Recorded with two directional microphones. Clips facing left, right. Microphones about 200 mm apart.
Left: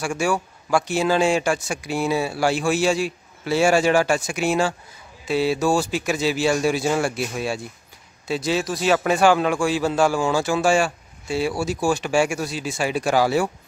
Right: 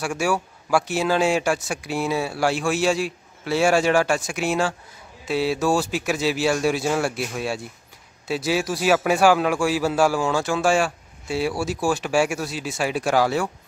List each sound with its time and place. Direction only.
0.0 s a man's voice: 5° right (ahead or behind)